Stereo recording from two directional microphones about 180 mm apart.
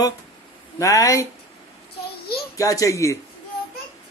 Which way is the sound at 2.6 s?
20° left (ahead or behind).